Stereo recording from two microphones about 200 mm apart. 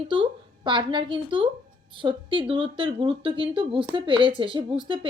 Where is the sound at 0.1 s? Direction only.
25° right (ahead or behind).